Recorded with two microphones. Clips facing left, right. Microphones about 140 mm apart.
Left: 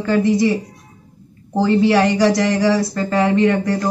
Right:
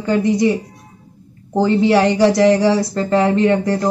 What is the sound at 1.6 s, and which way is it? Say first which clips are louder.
Speech: right 1 dB; 25° right (ahead or behind).